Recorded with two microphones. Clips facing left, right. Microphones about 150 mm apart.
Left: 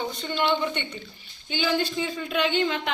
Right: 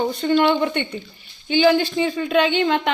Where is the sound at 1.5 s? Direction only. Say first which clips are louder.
Right 9 dB; 80° right.